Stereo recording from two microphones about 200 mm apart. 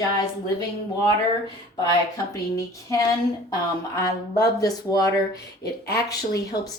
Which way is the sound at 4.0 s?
20° left (ahead or behind).